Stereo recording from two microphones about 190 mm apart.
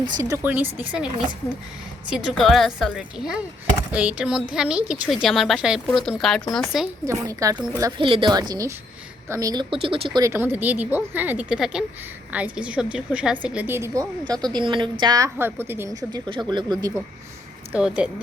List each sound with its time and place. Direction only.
0.2 s speech: 15° right (ahead or behind)
2.1 s a woman's voice: centre (ahead or behind)
7.0 s speech: 15° right (ahead or behind)
7.5 s speech: 5° right (ahead or behind)
7.8 s a woman's voice: 20° right (ahead or behind)
17.7 s speech: 5° right (ahead or behind)